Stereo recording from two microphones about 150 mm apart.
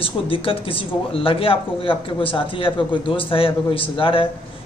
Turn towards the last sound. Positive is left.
turn(degrees=35)  # may be behind; listen again after turning